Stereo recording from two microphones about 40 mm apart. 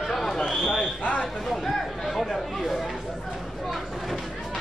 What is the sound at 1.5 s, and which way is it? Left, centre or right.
Chatter, centre.